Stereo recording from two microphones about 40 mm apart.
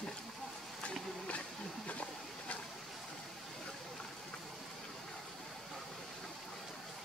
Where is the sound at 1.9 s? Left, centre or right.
Left.